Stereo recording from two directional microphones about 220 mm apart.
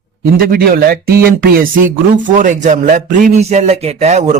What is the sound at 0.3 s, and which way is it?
A man's voice, 45° right (ahead or behind).